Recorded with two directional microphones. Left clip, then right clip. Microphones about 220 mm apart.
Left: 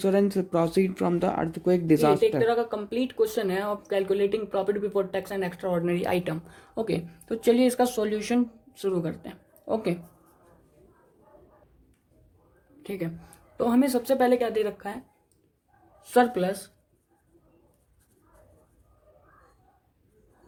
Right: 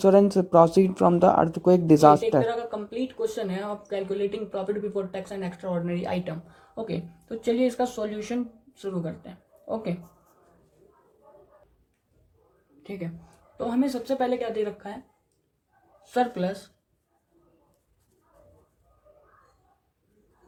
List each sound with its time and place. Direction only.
0.0 s speech: 10° right (ahead or behind)
2.5 s speech: 50° left (ahead or behind)
12.8 s a woman's voice: 35° left (ahead or behind)
16.0 s speech: 40° left (ahead or behind)